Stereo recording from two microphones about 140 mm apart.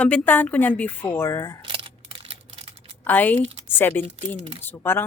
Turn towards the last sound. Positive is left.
turn(degrees=15)  # may be behind; listen again after turning